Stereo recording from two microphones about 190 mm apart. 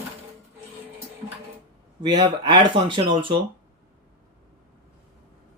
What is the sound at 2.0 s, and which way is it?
Speech, 25° right (ahead or behind).